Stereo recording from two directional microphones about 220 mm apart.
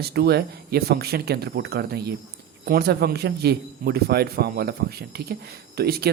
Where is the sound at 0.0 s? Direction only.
45° right (ahead or behind).